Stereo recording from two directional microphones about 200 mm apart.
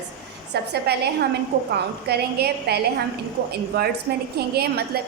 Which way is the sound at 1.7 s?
55° right (ahead or behind).